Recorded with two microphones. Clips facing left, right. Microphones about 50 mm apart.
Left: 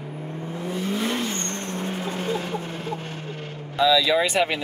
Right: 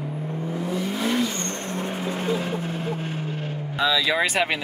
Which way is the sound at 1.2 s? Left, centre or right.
Left.